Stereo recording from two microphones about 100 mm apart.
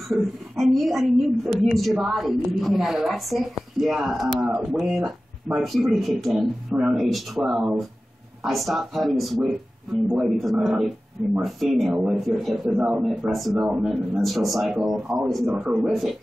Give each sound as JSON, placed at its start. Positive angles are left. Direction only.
{"t": 0.1, "sound": "a woman's voice", "side_deg": 0}
{"t": 12.6, "sound": "a woman's voice", "side_deg": -15}